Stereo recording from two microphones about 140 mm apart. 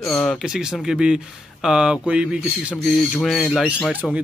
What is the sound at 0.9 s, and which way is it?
Speech, 5° right (ahead or behind).